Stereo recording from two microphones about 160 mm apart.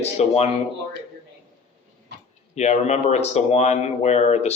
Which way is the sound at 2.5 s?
45° left (ahead or behind).